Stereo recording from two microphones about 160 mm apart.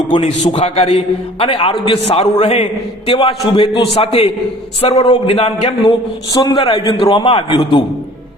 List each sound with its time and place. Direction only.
0.5 s a man's voice: 35° left (ahead or behind)
6.3 s a man's voice: 25° left (ahead or behind)